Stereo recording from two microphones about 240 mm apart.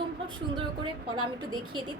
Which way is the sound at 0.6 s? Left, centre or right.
Centre.